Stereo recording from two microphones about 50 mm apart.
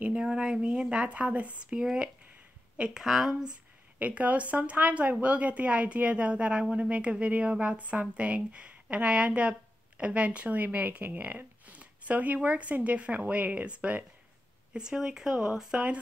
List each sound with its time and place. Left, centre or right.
0.2 s a woman's voice: centre
4.0 s a woman's voice: right
14.7 s speech: centre